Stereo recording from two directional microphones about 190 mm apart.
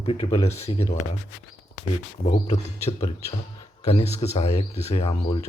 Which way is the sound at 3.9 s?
35° left (ahead or behind).